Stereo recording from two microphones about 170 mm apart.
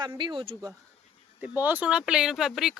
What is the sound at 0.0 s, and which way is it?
Speech, 25° right (ahead or behind).